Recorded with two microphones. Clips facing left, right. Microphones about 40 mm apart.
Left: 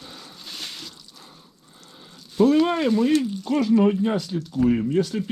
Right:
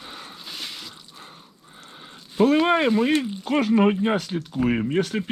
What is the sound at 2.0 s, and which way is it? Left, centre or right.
Speech, right.